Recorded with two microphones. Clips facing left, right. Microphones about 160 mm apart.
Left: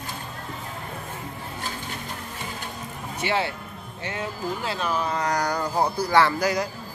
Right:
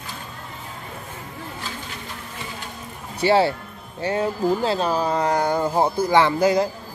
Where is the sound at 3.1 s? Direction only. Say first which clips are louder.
Right 8 dB; 35° right (ahead or behind).